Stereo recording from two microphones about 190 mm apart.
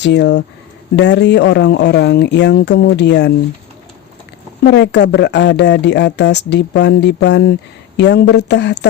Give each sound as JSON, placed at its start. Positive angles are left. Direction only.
{"t": 0.0, "sound": "speech", "side_deg": 65}
{"t": 4.6, "sound": "speech", "side_deg": 65}